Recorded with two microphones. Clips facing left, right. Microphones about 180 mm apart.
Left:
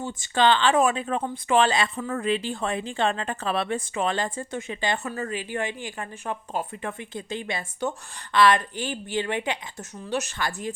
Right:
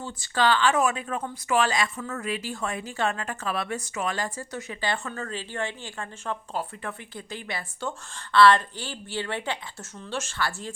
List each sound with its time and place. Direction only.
0.2 s a woman's voice: 25° left (ahead or behind)